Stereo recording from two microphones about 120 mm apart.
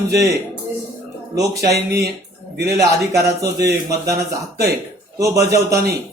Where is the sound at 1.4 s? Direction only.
25° right (ahead or behind).